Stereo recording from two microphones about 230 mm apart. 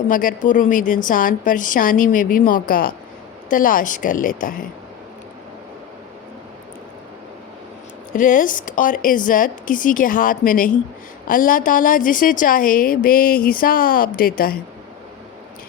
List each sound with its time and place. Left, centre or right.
0.1 s a woman's voice: left
8.1 s a woman's voice: left